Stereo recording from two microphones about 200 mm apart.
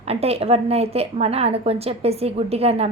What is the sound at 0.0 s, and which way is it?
A woman's voice, 30° right (ahead or behind).